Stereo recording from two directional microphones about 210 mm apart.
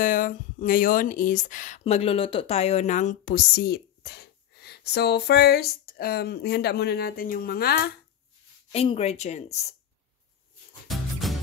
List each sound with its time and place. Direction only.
0.0 s speech: 40° left (ahead or behind)
8.7 s a woman's voice: 30° left (ahead or behind)
10.9 s music: centre (ahead or behind)